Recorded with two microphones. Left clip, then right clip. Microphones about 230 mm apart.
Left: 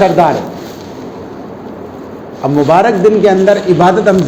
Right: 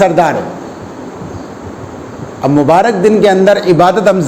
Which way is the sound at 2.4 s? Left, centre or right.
Right.